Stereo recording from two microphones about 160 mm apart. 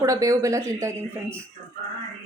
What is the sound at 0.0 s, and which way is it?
Speech, 20° right (ahead or behind).